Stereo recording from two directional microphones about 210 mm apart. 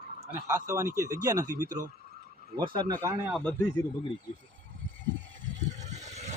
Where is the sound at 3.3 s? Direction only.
5° left (ahead or behind).